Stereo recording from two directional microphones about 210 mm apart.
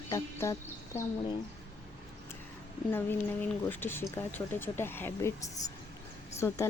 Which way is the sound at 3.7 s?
10° left (ahead or behind).